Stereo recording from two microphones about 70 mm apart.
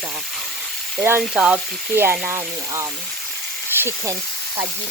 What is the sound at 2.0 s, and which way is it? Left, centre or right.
Speech, right.